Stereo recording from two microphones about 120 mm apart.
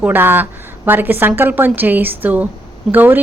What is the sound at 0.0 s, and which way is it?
A woman's voice, 15° right (ahead or behind).